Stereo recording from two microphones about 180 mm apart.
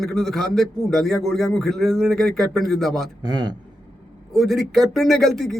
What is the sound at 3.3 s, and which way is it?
Speech, 25° right (ahead or behind).